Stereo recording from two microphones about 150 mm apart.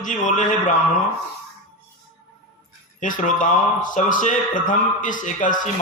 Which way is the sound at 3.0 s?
60° left (ahead or behind).